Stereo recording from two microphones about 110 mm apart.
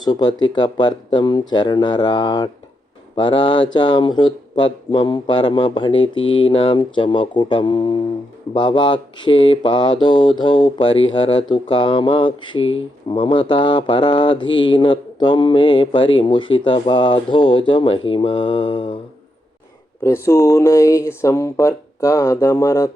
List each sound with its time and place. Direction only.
0.0 s speech: 40° left (ahead or behind)
3.2 s mantra: 50° left (ahead or behind)
20.0 s speech: 25° left (ahead or behind)